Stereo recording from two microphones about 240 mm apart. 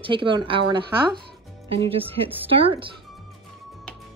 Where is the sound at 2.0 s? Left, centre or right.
Centre.